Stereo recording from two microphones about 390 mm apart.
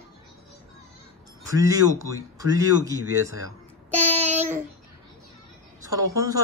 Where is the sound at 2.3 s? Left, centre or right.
Centre.